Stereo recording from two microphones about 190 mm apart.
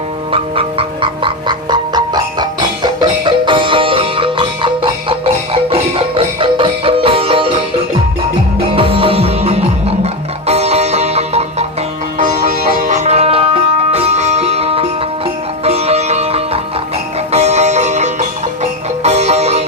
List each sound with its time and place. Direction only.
0.3 s a sound: 30° right (ahead or behind)
8.7 s music: 30° right (ahead or behind)
15.6 s sitar: 35° right (ahead or behind)
17.3 s music: 35° right (ahead or behind)